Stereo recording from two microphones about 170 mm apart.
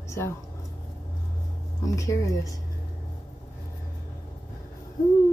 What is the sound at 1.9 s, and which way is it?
Speech, 20° left (ahead or behind).